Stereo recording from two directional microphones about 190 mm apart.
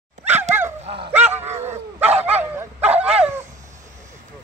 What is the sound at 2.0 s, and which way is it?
Dog, 35° right (ahead or behind).